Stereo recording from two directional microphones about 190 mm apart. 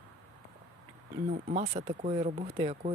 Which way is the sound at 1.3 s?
40° right (ahead or behind).